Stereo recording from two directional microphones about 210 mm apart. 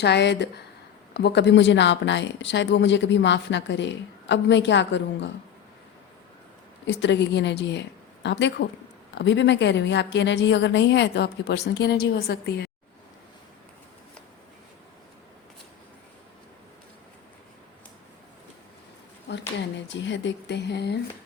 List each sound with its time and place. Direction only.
0.0 s speech: 55° left (ahead or behind)
6.8 s speech: 60° left (ahead or behind)
19.3 s speech: 55° left (ahead or behind)